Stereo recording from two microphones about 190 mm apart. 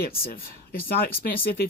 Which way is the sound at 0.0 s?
50° left (ahead or behind).